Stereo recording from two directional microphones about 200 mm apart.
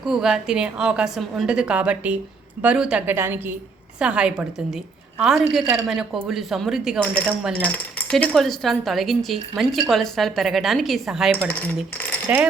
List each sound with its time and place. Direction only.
0.0 s a woman's voice: 5° right (ahead or behind)
12.3 s a woman's voice: 5° right (ahead or behind)